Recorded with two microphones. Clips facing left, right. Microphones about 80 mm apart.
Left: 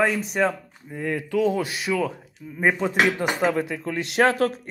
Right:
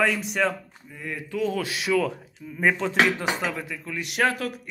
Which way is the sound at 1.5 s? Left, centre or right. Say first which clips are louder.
Even; centre.